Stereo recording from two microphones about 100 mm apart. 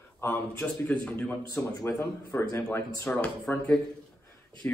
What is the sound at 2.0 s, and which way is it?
Speech, 25° left (ahead or behind).